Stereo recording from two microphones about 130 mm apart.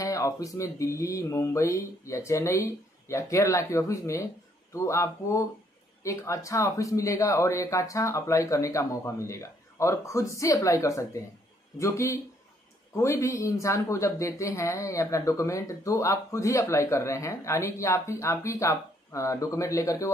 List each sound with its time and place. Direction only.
0.0 s speech: 25° left (ahead or behind)